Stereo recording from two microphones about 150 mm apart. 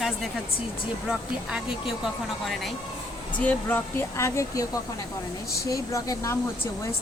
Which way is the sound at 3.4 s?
10° left (ahead or behind).